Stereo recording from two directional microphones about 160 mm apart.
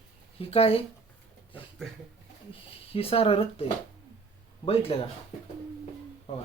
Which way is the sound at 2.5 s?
35° left (ahead or behind).